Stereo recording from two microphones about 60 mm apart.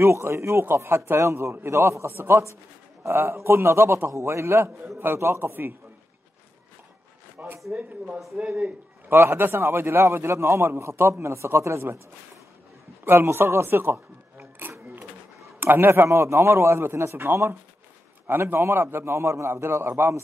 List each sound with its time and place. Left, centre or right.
0.0 s a man's voice: right
7.4 s speech: right
9.1 s a man's voice: right
13.0 s a man's voice: right
15.6 s a man's voice: right
15.9 s a man's voice: right
19.6 s a man's voice: right